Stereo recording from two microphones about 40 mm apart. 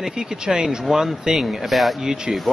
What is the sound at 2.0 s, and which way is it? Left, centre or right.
Speech, centre.